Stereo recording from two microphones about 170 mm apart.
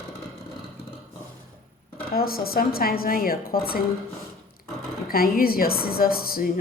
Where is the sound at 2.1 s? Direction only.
60° left (ahead or behind).